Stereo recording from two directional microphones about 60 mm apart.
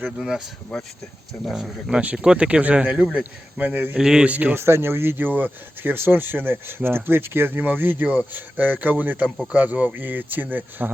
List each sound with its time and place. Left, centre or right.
0.2 s speech: centre
0.7 s speech: centre
1.9 s speech: right
3.9 s speech: centre
4.3 s speech: right
4.5 s speech: right